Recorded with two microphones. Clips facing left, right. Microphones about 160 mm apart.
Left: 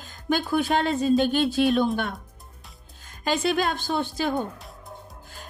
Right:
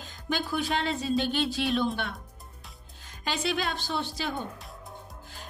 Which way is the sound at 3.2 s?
50° left (ahead or behind).